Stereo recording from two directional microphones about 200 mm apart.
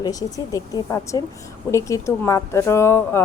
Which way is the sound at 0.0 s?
15° left (ahead or behind).